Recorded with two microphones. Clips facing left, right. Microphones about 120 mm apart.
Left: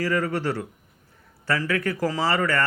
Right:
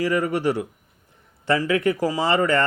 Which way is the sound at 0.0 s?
15° right (ahead or behind).